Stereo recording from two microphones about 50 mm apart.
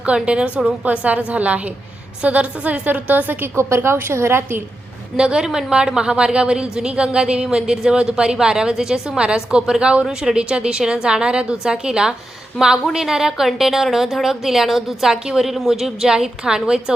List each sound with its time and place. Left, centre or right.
0.0 s a woman's voice: right
3.4 s a woman's voice: right
5.1 s a woman's voice: centre